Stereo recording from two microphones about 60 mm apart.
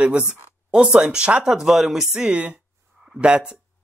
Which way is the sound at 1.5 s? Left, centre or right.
Centre.